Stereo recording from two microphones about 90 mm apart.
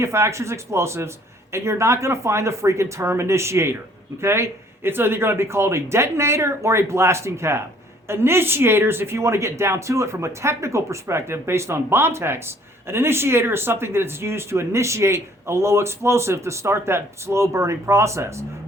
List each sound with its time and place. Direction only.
0.0 s speech: 30° right (ahead or behind)